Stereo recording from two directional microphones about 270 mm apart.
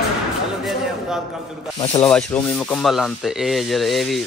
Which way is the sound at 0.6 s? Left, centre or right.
Centre.